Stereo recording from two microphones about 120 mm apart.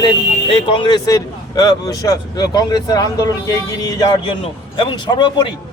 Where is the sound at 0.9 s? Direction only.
30° left (ahead or behind).